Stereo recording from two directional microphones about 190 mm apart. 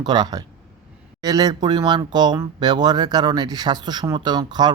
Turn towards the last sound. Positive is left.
turn(degrees=-20)  # may be behind; listen again after turning